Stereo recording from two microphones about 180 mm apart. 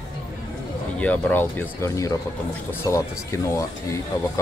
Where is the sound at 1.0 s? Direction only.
10° left (ahead or behind).